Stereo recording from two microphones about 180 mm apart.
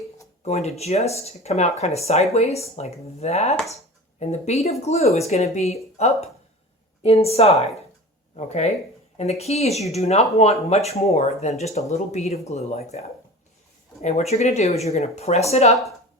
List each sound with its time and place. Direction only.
0.4 s speech: 35° left (ahead or behind)